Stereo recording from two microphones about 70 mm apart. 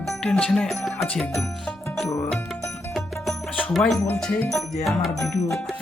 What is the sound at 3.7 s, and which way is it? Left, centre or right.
Speech, centre.